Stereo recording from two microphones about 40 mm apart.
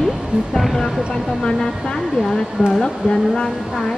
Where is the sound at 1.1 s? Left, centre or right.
Centre.